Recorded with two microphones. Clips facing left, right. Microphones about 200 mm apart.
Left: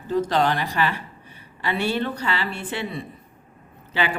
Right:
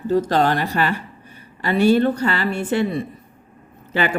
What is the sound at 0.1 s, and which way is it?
A woman's voice, 45° right (ahead or behind).